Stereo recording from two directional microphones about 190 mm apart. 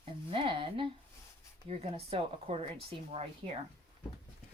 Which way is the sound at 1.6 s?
30° right (ahead or behind).